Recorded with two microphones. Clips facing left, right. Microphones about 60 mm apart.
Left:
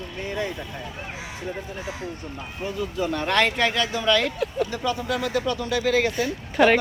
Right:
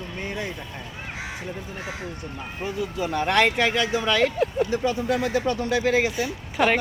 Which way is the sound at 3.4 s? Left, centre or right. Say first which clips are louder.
Right 1 dB; right.